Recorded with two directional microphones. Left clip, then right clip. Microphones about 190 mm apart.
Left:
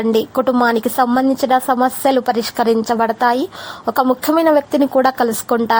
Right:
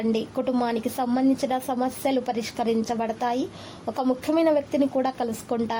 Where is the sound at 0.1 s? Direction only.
20° left (ahead or behind).